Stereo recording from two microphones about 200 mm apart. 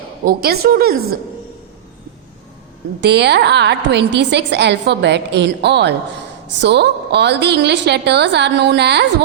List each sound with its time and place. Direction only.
0.3 s a woman's voice: 50° right (ahead or behind)
3.0 s a woman's voice: 55° right (ahead or behind)